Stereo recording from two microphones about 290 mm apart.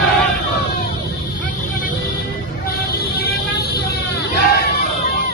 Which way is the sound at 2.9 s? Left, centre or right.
Left.